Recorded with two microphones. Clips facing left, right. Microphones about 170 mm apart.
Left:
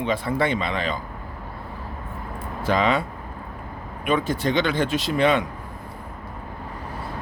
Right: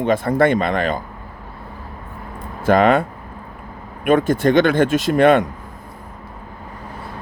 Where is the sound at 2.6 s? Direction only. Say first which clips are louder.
Right 7 dB; 50° right (ahead or behind).